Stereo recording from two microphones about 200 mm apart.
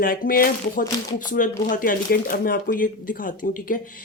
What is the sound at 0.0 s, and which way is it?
Speech, 45° left (ahead or behind).